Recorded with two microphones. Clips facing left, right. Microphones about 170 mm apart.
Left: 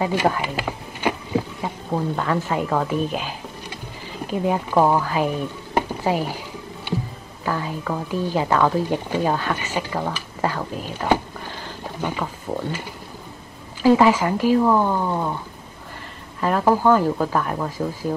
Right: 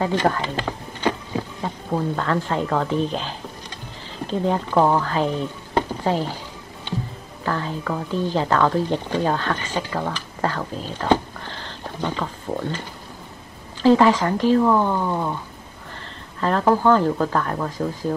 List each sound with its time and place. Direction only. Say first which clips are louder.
0.0 s speech: even; 10° left (ahead or behind)
6.9 s music: left 2 dB; 10° left (ahead or behind)
7.4 s speech: even; 10° left (ahead or behind)
13.8 s speech: even; 10° left (ahead or behind)
16.3 s speech: even; 10° left (ahead or behind)